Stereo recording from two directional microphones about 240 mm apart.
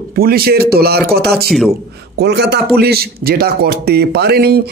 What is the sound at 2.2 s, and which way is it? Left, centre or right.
Speech, right.